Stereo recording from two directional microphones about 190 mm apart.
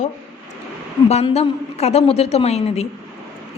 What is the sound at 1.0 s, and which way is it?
A woman's voice, 35° left (ahead or behind).